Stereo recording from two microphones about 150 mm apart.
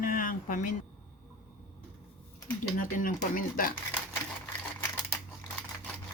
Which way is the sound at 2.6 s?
65° left (ahead or behind).